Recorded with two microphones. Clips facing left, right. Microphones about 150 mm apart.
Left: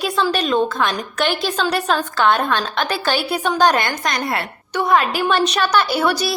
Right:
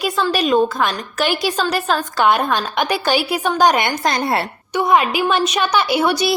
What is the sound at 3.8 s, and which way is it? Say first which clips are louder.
Speech: right 3 dB; 30° right (ahead or behind).